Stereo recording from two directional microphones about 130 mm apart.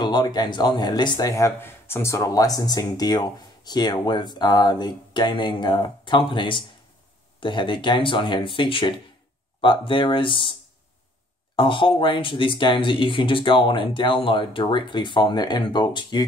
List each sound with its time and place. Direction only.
0.0 s speech: 35° left (ahead or behind)
1.3 s speech: 20° left (ahead or behind); by 10.5 s 40° left (ahead or behind)
11.5 s speech: 40° left (ahead or behind)